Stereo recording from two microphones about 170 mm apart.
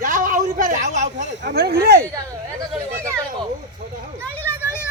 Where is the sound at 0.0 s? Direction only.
50° right (ahead or behind).